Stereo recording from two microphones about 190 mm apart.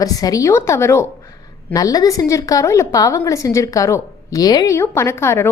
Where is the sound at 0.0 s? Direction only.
20° left (ahead or behind).